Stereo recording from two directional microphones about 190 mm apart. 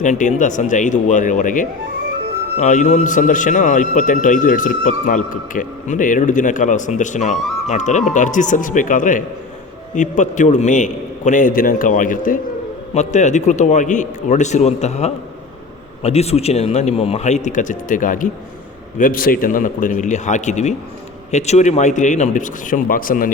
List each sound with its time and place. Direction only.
0.0 s a man's voice: 40° left (ahead or behind)